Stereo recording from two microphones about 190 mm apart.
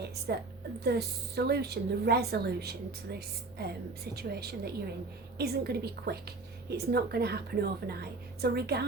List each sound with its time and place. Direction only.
0.3 s a woman's voice: 55° right (ahead or behind)